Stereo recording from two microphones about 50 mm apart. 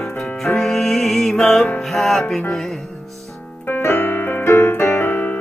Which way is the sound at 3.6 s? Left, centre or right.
Left.